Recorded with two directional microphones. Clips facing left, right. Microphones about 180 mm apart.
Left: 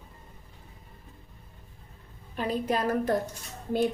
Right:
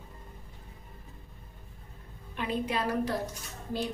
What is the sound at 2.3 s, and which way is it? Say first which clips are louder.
Speech: left 3 dB; 40° left (ahead or behind).